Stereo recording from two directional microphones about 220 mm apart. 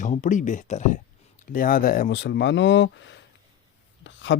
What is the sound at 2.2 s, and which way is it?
Speech, 55° left (ahead or behind).